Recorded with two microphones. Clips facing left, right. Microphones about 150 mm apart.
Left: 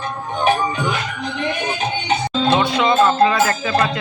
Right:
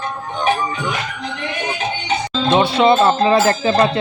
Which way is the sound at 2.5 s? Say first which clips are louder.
Right 4 dB; 30° right (ahead or behind).